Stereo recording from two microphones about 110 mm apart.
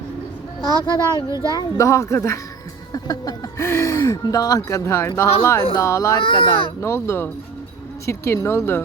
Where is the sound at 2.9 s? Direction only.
35° left (ahead or behind).